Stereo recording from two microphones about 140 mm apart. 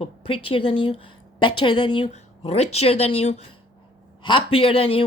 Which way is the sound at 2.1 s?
50° left (ahead or behind).